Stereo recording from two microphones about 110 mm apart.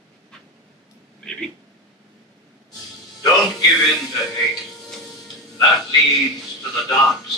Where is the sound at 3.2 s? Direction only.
35° left (ahead or behind).